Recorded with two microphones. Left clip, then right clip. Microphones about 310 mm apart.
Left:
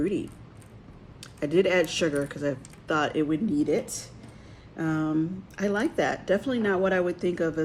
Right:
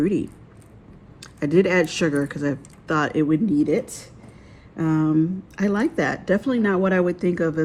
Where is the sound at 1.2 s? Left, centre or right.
Right.